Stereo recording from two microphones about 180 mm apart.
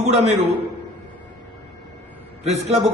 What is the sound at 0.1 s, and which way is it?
Speech, 35° right (ahead or behind).